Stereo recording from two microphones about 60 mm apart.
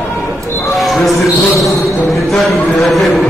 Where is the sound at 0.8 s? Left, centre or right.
Centre.